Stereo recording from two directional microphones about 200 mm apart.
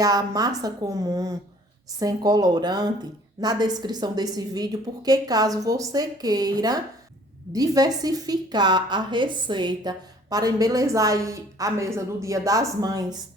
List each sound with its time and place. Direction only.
0.0 s a woman's voice: 20° right (ahead or behind)